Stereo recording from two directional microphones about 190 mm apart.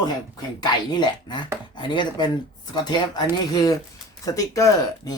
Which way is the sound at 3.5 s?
20° left (ahead or behind).